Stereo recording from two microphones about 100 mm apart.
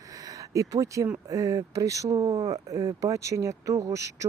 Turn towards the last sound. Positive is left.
turn(degrees=-30)  # may be behind; listen again after turning